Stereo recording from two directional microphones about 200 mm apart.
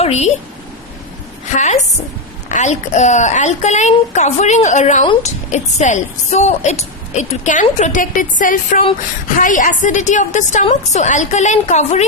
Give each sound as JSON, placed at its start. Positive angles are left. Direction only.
{"t": 0.0, "sound": "a woman's voice", "side_deg": 35}
{"t": 1.5, "sound": "a woman's voice", "side_deg": 35}